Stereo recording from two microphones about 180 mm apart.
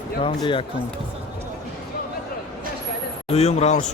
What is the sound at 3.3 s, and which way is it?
Speech, 35° left (ahead or behind).